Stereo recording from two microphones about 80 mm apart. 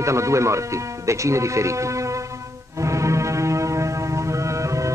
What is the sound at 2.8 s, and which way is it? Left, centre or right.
Music, right.